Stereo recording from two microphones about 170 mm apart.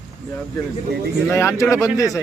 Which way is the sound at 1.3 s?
15° left (ahead or behind).